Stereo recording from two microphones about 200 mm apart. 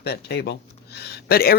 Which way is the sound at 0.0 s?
55° left (ahead or behind).